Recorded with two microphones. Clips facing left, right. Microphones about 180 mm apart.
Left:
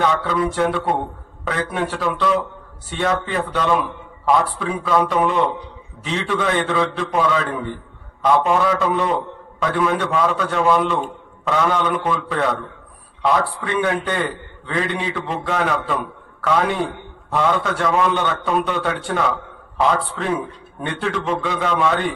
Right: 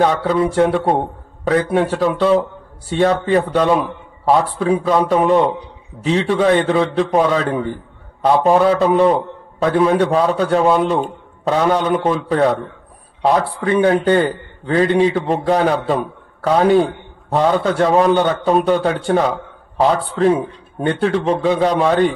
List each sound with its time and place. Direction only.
0.0 s a man's voice: 35° right (ahead or behind)